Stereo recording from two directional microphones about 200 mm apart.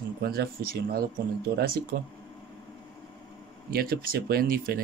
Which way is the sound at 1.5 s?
50° right (ahead or behind).